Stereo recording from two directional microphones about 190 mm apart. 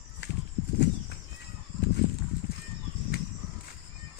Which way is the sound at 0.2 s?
65° left (ahead or behind).